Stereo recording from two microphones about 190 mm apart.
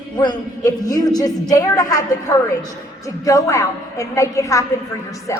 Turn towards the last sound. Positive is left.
turn(degrees=15)  # may be behind; listen again after turning